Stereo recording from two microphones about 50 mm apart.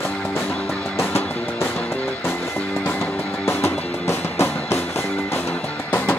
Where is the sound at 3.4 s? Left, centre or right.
Left.